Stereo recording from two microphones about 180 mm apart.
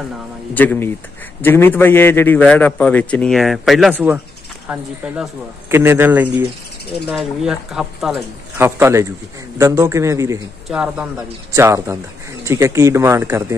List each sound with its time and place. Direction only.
0.6 s a man's voice: 10° left (ahead or behind)
8.5 s a man's voice: 15° right (ahead or behind)
10.7 s a man's voice: 5° right (ahead or behind)